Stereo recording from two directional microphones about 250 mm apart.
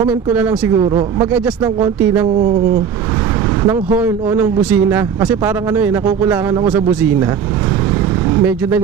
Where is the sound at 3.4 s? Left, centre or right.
Centre.